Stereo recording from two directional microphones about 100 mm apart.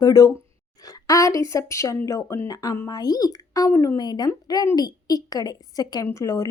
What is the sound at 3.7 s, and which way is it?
Speech, 25° left (ahead or behind).